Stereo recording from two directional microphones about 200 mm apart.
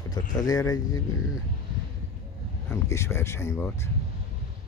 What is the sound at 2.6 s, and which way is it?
Speech, 15° left (ahead or behind).